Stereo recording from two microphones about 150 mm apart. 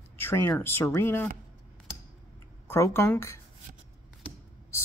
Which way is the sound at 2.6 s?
15° left (ahead or behind).